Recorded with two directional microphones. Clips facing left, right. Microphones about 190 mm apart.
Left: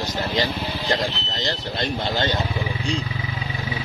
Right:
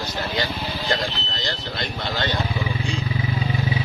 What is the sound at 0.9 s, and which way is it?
Speech, 20° left (ahead or behind).